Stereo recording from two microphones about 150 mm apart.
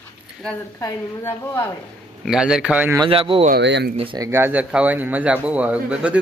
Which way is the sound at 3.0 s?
35° right (ahead or behind).